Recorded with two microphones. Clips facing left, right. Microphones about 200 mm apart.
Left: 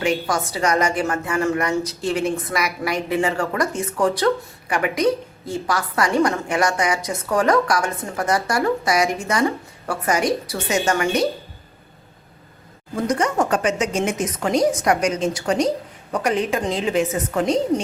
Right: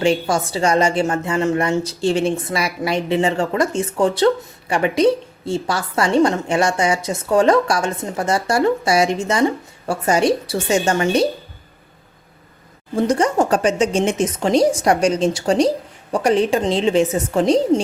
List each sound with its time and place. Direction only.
0.0 s a woman's voice: 30° right (ahead or behind)
13.0 s a woman's voice: 30° right (ahead or behind)